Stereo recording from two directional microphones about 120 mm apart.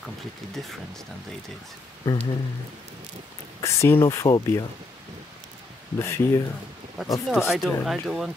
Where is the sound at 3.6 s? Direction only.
25° left (ahead or behind).